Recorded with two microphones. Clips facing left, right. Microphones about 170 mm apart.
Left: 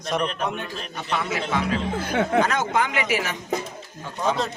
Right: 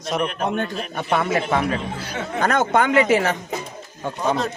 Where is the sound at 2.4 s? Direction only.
55° right (ahead or behind).